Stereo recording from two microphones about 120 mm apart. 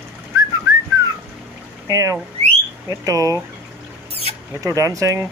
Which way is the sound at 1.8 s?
30° right (ahead or behind).